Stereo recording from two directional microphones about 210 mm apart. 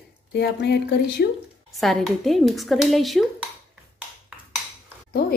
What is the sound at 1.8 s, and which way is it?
Speech, centre (ahead or behind).